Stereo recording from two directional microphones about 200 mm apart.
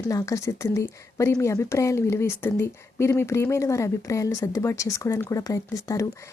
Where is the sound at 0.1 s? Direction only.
15° left (ahead or behind).